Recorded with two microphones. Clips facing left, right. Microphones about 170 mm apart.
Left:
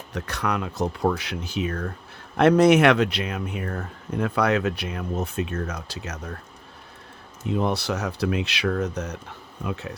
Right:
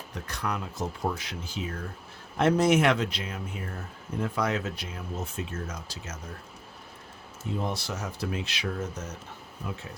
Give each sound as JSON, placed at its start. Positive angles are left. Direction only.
{"t": 0.1, "sound": "speech", "side_deg": 75}
{"t": 7.4, "sound": "speech", "side_deg": 70}